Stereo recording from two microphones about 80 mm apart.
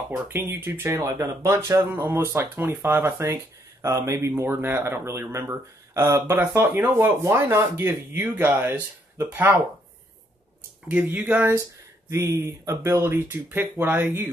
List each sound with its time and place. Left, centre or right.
0.1 s speech: right
0.9 s speech: right
10.9 s speech: centre
12.1 s speech: right